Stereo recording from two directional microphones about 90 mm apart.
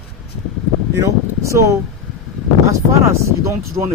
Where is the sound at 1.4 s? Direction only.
35° right (ahead or behind).